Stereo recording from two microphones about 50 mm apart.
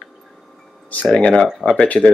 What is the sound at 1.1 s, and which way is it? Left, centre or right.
Speech, centre.